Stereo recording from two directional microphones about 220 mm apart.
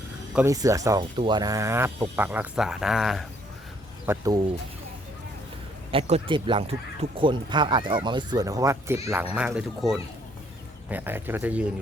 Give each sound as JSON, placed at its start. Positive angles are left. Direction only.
{"t": 0.3, "sound": "speech", "side_deg": -15}
{"t": 4.0, "sound": "speech", "side_deg": -15}
{"t": 5.9, "sound": "speech", "side_deg": -25}